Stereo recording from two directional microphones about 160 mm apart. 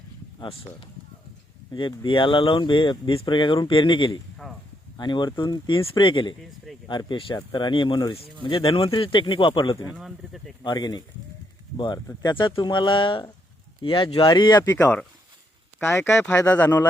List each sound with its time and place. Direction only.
0.3 s speech: 35° left (ahead or behind)
4.4 s a sound: centre (ahead or behind)
4.9 s speech: 30° left (ahead or behind)
9.9 s speech: centre (ahead or behind)
10.6 s speech: 25° left (ahead or behind)
12.0 s speech: 25° left (ahead or behind)
16.0 s speech: 15° left (ahead or behind)